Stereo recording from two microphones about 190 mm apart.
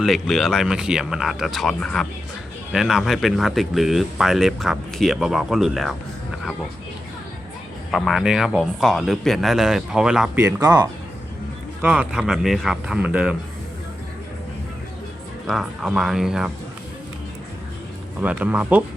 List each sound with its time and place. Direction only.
0.0 s speech: centre (ahead or behind)
7.9 s speech: centre (ahead or behind)
10.6 s speech: 20° right (ahead or behind)
11.8 s speech: 10° right (ahead or behind)
15.4 s speech: centre (ahead or behind)
18.2 s speech: 5° right (ahead or behind)